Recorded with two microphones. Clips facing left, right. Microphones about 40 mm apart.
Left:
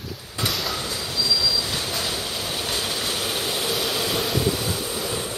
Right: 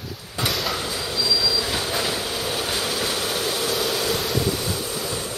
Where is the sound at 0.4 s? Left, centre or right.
Centre.